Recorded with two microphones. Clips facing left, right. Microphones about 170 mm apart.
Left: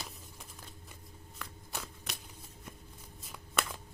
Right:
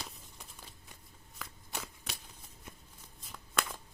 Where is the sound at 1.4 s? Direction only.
Centre (ahead or behind).